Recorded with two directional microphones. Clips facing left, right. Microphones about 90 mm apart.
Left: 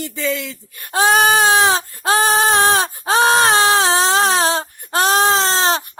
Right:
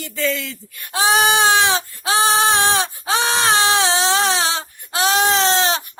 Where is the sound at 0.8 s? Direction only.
45° left (ahead or behind).